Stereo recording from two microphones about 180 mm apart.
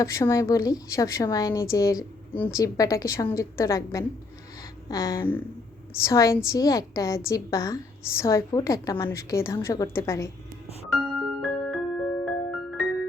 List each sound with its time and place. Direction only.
0.0 s a woman's voice: 15° left (ahead or behind)
10.9 s music: centre (ahead or behind)